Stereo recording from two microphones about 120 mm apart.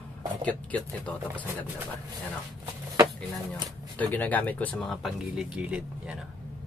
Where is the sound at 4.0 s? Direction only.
15° left (ahead or behind).